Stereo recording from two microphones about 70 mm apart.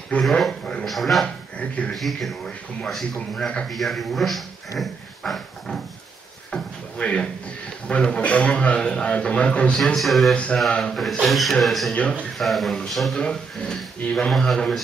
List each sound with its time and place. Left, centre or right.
0.2 s a man's voice: centre
1.2 s speech: centre
2.0 s speech: centre
7.0 s a man's voice: centre
9.9 s speech: centre
10.3 s a man's voice: centre
11.9 s a man's voice: centre
12.4 s a man's voice: centre